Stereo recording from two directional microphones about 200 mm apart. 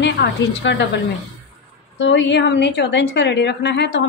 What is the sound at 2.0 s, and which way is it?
A woman's voice, 65° left (ahead or behind).